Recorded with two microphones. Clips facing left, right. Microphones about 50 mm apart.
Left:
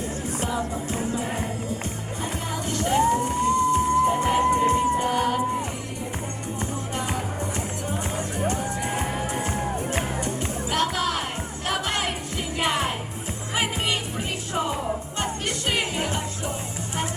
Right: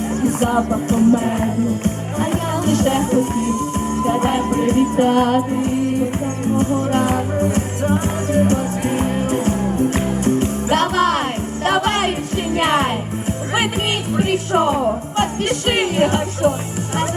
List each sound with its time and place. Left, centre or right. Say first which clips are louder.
0.1 s music: right 11 dB; right
10.2 s music: right 10 dB; right
14.2 s music: right 11 dB; right